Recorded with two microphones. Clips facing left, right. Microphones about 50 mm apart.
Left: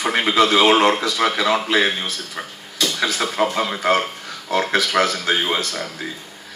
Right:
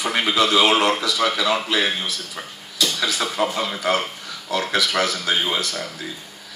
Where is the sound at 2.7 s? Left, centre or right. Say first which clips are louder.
Left 1 dB; left.